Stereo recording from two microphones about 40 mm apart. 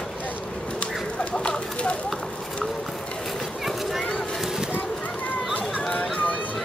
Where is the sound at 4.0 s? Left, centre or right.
Left.